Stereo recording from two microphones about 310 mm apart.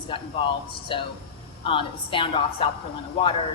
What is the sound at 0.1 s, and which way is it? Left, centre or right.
A woman's voice, centre.